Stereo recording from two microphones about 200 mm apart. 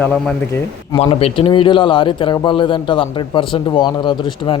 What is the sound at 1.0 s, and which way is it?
A man's voice, 30° left (ahead or behind).